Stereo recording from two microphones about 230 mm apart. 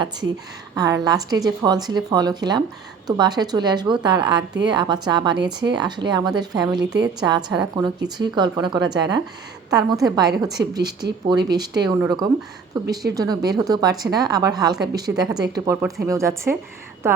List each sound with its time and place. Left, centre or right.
0.8 s a woman's voice: centre